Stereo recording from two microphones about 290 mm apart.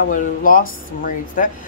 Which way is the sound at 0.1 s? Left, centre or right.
Left.